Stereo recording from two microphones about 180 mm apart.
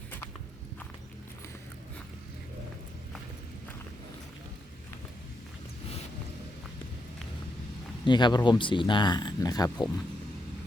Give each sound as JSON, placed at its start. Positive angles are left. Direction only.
{"t": 8.0, "sound": "speech", "side_deg": 25}